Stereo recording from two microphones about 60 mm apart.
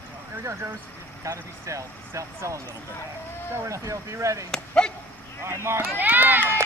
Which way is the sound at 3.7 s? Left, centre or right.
Right.